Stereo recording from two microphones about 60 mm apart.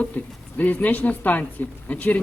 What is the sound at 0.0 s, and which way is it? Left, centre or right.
Speech, left.